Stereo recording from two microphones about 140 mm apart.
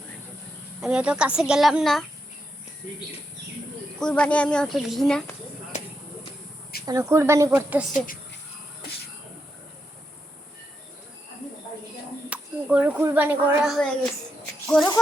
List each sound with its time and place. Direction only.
0.8 s speech: 5° right (ahead or behind)
4.0 s speech: 10° left (ahead or behind)
6.8 s speech: 20° right (ahead or behind)
7.9 s speech: 80° left
12.3 s a sound: 10° right (ahead or behind)
13.1 s speech: 15° right (ahead or behind)
13.7 s speech: 5° left (ahead or behind)